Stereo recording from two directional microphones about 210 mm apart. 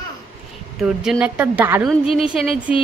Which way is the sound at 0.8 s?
5° right (ahead or behind).